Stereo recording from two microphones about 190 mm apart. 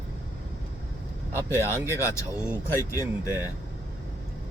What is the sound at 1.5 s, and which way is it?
Speech, 15° left (ahead or behind).